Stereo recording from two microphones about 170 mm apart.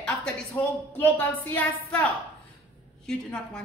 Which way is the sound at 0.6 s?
25° left (ahead or behind).